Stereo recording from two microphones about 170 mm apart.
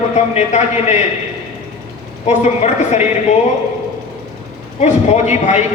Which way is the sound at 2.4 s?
40° left (ahead or behind).